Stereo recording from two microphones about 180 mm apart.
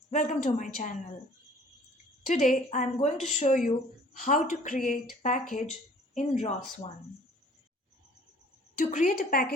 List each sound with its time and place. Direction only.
0.1 s speech: 45° left (ahead or behind)
2.2 s a woman's voice: 40° left (ahead or behind)
6.1 s speech: 35° left (ahead or behind)
8.9 s speech: 45° left (ahead or behind)